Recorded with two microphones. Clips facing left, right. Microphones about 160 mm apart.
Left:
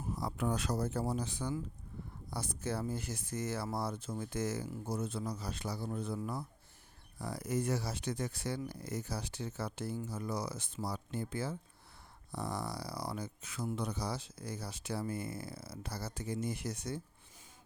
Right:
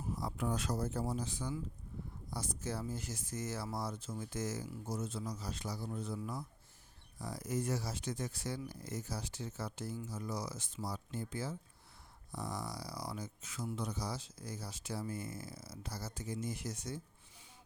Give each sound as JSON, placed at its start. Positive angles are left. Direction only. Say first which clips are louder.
{"t": 0.2, "sound": "speech", "louder": "left 3 dB", "side_deg": 70}